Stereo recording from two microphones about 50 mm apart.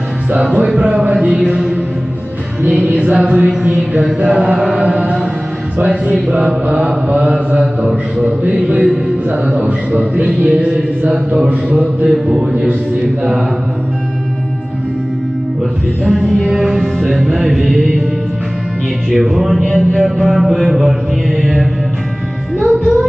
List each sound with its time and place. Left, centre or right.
0.7 s a man's voice: centre
2.7 s mantra: right
3.4 s a man's voice: centre
4.2 s mantra: right
8.8 s a man's voice: centre
10.4 s music: right
11.0 s mantra: right
12.1 s a man's voice: centre
16.1 s a man's voice: centre
16.5 s mantra: centre
19.0 s mantra: centre
22.6 s music: centre